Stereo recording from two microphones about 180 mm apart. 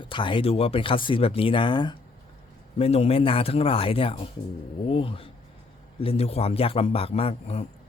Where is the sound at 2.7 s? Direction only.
35° left (ahead or behind).